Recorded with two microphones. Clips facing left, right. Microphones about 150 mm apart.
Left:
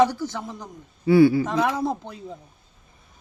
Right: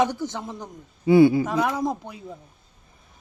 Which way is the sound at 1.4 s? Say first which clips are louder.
Left 1 dB; 5° right (ahead or behind).